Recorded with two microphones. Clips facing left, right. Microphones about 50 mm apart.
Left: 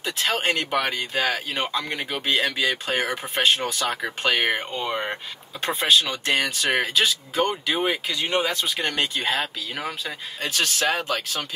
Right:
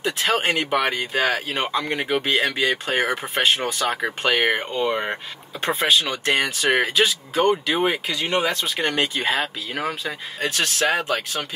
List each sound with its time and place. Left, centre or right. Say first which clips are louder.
0.0 s speech: right 3 dB; centre
10.9 s speech: right 3 dB; right